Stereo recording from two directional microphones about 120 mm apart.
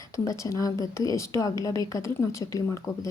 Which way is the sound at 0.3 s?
25° left (ahead or behind).